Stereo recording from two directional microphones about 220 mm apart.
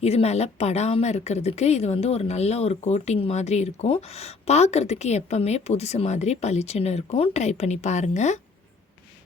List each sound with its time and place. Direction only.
0.0 s a woman's voice: 30° left (ahead or behind)